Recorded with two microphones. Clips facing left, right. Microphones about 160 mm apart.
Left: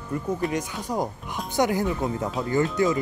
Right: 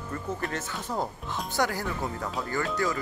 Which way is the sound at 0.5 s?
15° left (ahead or behind).